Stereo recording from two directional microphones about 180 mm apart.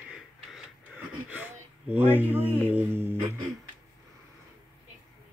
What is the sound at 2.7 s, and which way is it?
Speech, 10° right (ahead or behind).